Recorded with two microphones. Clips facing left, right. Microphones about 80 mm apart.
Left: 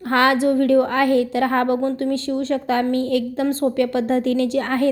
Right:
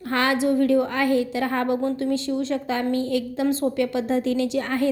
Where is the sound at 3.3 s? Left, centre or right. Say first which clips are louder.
Left 2 dB; left.